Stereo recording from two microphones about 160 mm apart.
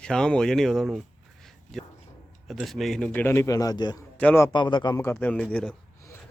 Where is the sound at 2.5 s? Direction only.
Centre (ahead or behind); by 3.9 s 25° left (ahead or behind).